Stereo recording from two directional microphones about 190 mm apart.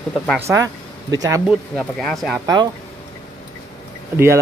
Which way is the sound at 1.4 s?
5° left (ahead or behind).